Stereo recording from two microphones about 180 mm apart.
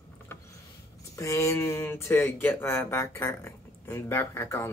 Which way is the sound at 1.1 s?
15° left (ahead or behind).